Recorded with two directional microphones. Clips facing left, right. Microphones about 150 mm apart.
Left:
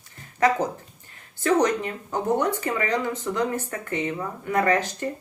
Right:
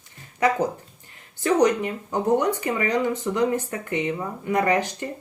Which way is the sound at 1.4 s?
15° right (ahead or behind).